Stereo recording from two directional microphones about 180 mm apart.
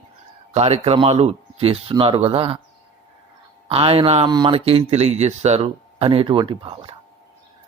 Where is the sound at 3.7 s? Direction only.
30° right (ahead or behind).